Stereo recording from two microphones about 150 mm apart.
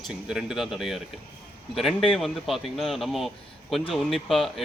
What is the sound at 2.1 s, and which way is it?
A man's voice, centre (ahead or behind).